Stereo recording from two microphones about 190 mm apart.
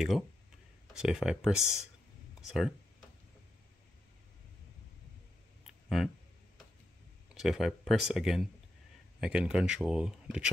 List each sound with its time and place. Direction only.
0.9 s speech: 5° right (ahead or behind)
5.6 s a sound: centre (ahead or behind)
7.3 s speech: centre (ahead or behind)